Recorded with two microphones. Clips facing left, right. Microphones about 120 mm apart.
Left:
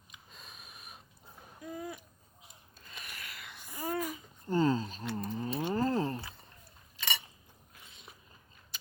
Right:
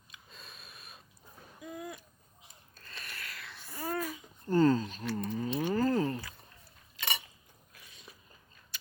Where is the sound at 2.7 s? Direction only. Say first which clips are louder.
Right 1 dB; 15° left (ahead or behind).